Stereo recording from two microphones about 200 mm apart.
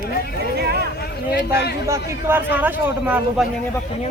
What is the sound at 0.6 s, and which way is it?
Speech, 55° right (ahead or behind).